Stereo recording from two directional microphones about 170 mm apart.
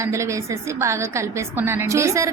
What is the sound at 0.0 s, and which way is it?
A woman's voice, 15° right (ahead or behind).